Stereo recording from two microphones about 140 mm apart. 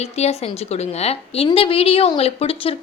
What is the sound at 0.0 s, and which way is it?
A woman's voice, 50° left (ahead or behind).